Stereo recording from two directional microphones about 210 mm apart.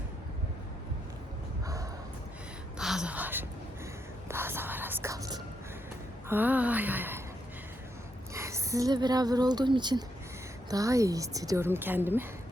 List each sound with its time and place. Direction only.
1.6 s bow-wow: 15° right (ahead or behind)
2.7 s a woman's voice: 5° right (ahead or behind)
8.3 s a woman's voice: 15° right (ahead or behind)